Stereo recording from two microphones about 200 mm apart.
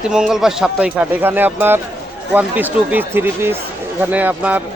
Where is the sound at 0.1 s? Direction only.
5° right (ahead or behind).